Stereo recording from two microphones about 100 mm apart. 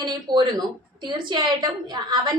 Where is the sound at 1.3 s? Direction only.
50° right (ahead or behind).